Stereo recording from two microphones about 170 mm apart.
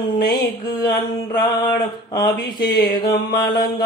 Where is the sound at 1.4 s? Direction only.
25° left (ahead or behind).